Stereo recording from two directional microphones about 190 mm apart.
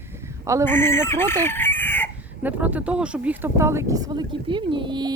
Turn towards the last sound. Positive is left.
turn(degrees=-25)  # may be behind; listen again after turning